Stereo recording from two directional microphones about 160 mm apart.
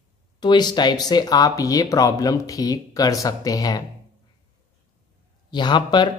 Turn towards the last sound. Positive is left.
turn(degrees=30)  # may be behind; listen again after turning